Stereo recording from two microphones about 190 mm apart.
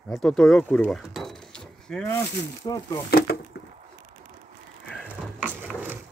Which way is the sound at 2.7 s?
20° left (ahead or behind).